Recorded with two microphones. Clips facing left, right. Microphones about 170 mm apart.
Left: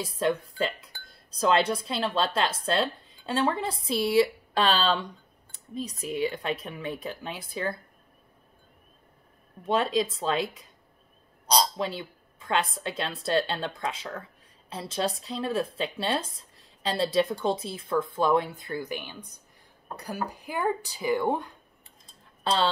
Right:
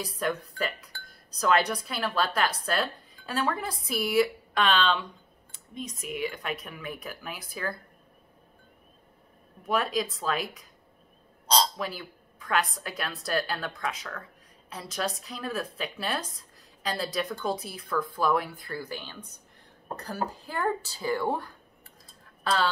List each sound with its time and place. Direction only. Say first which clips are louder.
0.0 s speech: left 4 dB; 25° left (ahead or behind)
9.6 s speech: left 3 dB; 25° left (ahead or behind)
11.4 s bird: left 1 dB; 10° left (ahead or behind)
11.7 s speech: left 3 dB; 25° left (ahead or behind)